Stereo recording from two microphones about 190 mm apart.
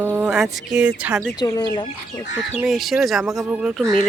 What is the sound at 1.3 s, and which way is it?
Speech, 20° left (ahead or behind).